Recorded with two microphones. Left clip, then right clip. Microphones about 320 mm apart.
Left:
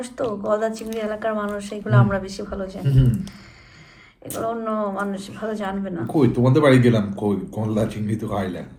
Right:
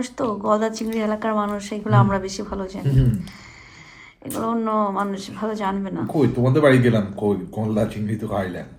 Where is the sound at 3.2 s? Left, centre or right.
Centre.